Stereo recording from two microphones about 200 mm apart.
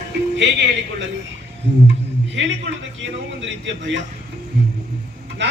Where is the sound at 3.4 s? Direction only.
65° right (ahead or behind).